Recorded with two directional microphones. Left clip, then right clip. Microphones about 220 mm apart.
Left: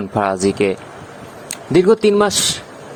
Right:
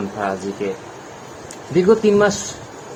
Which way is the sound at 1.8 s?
35° left (ahead or behind).